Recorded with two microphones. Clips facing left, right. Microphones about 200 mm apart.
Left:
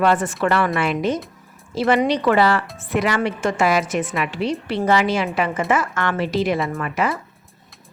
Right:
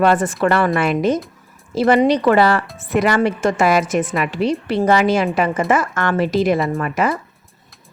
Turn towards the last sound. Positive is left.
turn(degrees=-45)  # may be behind; listen again after turning